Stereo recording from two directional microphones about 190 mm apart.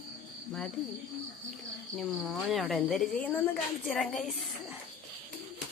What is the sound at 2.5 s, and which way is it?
A woman's voice, centre (ahead or behind).